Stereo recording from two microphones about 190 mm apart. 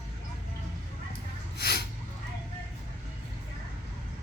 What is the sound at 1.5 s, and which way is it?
Snort, 55° left (ahead or behind).